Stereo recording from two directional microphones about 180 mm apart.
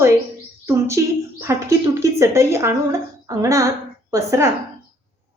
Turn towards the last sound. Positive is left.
turn(degrees=-15)  # may be behind; listen again after turning